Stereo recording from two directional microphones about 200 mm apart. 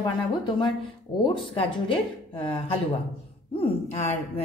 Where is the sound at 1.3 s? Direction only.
25° left (ahead or behind).